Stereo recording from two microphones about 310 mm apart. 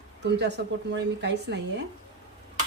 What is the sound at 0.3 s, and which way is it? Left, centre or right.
A woman's voice, right.